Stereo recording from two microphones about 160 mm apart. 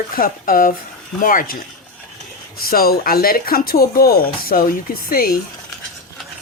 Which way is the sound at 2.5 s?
70° left (ahead or behind).